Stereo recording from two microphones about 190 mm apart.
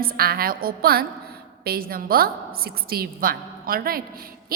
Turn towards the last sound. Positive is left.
turn(degrees=-50)  # may be behind; listen again after turning